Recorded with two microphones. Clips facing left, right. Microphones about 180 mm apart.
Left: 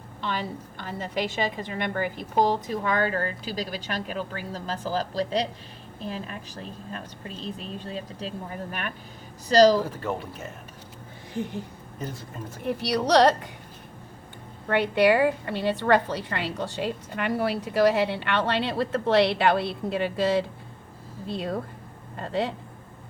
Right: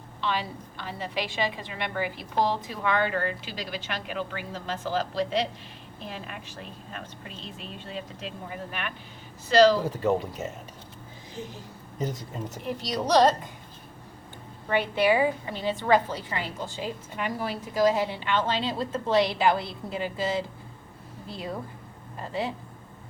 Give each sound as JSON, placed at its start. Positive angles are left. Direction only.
{"t": 0.2, "sound": "a woman's voice", "side_deg": 45}
{"t": 9.8, "sound": "speech", "side_deg": -15}
{"t": 11.3, "sound": "a woman's voice", "side_deg": 60}
{"t": 12.6, "sound": "a woman's voice", "side_deg": 65}
{"t": 14.7, "sound": "a woman's voice", "side_deg": 65}